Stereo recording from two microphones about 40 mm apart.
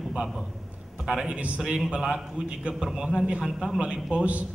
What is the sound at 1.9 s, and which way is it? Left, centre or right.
A man's voice, right.